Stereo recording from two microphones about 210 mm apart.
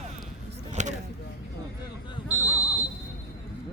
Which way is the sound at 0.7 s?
35° right (ahead or behind).